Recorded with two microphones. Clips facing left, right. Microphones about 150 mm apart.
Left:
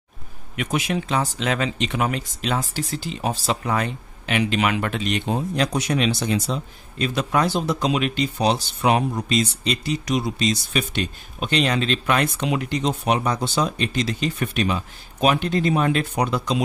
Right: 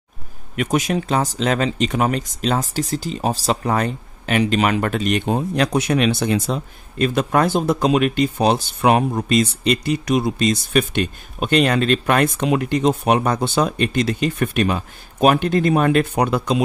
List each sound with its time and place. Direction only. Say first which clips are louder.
0.6 s speech: right 4 dB; 45° right (ahead or behind)